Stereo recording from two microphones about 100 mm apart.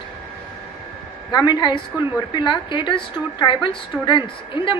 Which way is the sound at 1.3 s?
45° left (ahead or behind).